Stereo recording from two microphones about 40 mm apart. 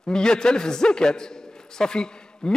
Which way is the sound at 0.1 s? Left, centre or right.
Centre.